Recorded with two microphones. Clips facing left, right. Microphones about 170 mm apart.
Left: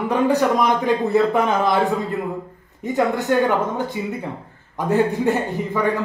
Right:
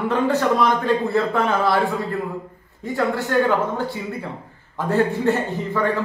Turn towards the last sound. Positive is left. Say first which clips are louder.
# left 1 dB
turn(degrees=15)  # may be behind; listen again after turning